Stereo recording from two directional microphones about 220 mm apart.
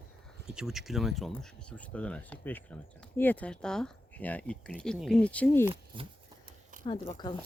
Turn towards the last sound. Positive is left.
turn(degrees=20)  # may be behind; listen again after turning